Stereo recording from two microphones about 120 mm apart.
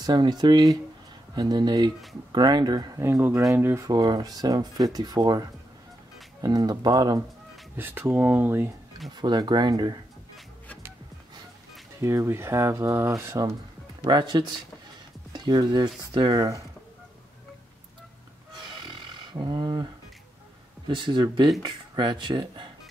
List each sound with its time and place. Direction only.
0.0 s speech: 35° right (ahead or behind)
3.0 s speech: 20° right (ahead or behind); by 5.4 s 35° right (ahead or behind)
6.4 s speech: 30° right (ahead or behind)
7.7 s speech: 15° right (ahead or behind)
9.1 s speech: 35° right (ahead or behind)
12.0 s speech: 20° right (ahead or behind)
14.0 s speech: 40° right (ahead or behind)
18.7 s roar: 35° right (ahead or behind)
20.8 s speech: 40° right (ahead or behind)